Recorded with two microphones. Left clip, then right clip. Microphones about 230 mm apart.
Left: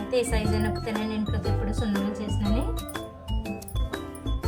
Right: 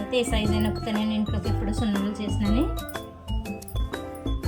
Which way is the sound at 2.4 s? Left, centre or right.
Centre.